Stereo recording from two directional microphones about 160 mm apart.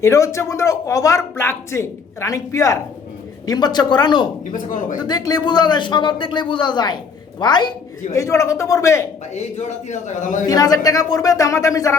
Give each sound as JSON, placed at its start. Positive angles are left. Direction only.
{"t": 0.0, "sound": "speech", "side_deg": 20}
{"t": 4.5, "sound": "speech", "side_deg": 55}
{"t": 4.9, "sound": "speech", "side_deg": 25}
{"t": 9.3, "sound": "a man's voice", "side_deg": 45}
{"t": 10.4, "sound": "speech", "side_deg": 25}